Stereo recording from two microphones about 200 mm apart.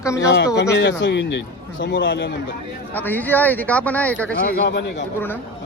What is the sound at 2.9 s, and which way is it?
Speech, 10° left (ahead or behind).